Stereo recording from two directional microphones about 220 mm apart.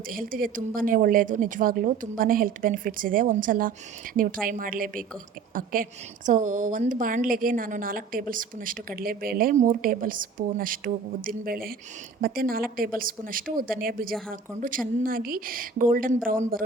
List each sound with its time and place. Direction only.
0.1 s a woman's voice: 40° right (ahead or behind)